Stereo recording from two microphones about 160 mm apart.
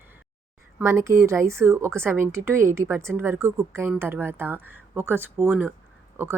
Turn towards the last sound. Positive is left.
turn(degrees=-15)  # may be behind; listen again after turning